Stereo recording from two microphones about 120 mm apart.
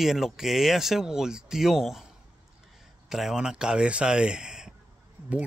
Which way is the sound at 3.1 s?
5° right (ahead or behind).